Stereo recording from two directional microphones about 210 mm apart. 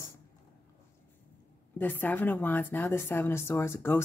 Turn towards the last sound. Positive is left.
turn(degrees=10)  # may be behind; listen again after turning